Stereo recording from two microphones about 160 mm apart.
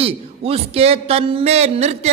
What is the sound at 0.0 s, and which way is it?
Speech, 35° right (ahead or behind).